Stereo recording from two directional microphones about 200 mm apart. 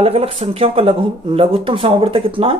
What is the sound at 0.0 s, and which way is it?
Speech, 30° right (ahead or behind).